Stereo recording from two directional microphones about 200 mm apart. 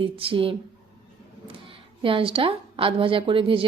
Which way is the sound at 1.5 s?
25° right (ahead or behind).